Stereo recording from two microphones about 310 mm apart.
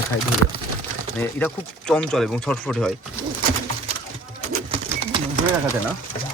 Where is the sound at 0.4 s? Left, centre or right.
Right.